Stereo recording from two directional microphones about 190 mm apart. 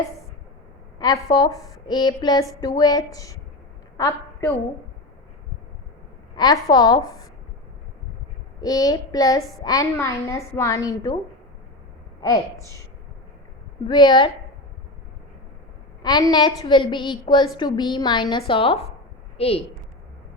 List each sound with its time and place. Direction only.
0.9 s a woman's voice: 20° left (ahead or behind)
6.3 s a woman's voice: 20° left (ahead or behind)
8.6 s a woman's voice: 20° left (ahead or behind)
12.2 s a woman's voice: 15° left (ahead or behind)
13.8 s a woman's voice: 25° left (ahead or behind)
16.0 s a woman's voice: 20° left (ahead or behind)